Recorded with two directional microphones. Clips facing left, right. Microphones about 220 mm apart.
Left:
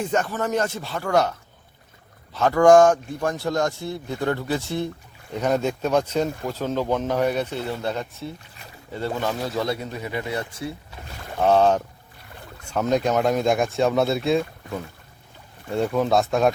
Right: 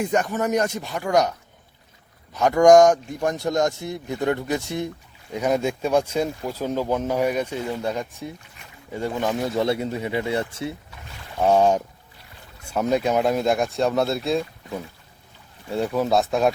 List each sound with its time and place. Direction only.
0.0 s speech: 15° right (ahead or behind)
2.3 s speech: 15° right (ahead or behind)
11.4 s speech: 10° right (ahead or behind)
15.7 s speech: centre (ahead or behind)